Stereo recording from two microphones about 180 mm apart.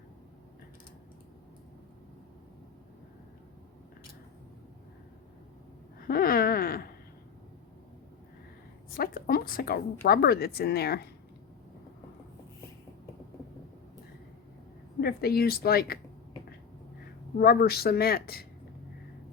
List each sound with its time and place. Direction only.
6.1 s a sound: 55° left (ahead or behind)
9.0 s a woman's voice: 55° left (ahead or behind)
15.0 s a woman's voice: 60° left (ahead or behind)
17.4 s a woman's voice: 60° left (ahead or behind)